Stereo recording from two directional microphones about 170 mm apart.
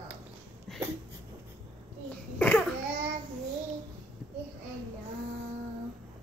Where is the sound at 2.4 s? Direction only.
5° left (ahead or behind).